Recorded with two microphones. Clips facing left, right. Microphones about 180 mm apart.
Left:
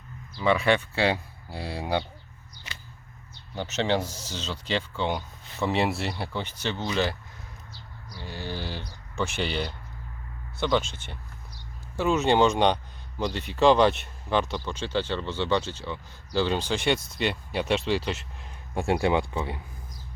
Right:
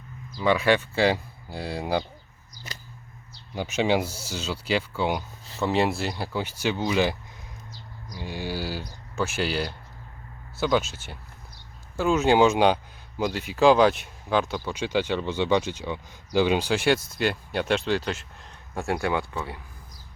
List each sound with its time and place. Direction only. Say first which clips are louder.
0.3 s speech: right 1 dB; centre (ahead or behind)
3.5 s speech: right 3 dB; 10° right (ahead or behind)
18.7 s speech: left 2 dB; 15° left (ahead or behind)